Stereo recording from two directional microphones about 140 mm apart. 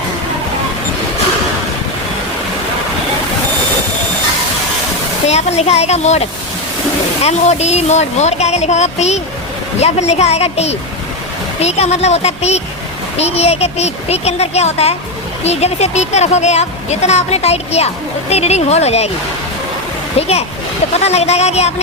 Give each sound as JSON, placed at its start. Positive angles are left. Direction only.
{"t": 5.2, "sound": "speech", "side_deg": 50}
{"t": 20.1, "sound": "speech", "side_deg": 45}